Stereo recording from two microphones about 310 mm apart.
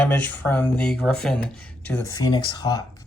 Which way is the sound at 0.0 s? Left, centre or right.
Centre.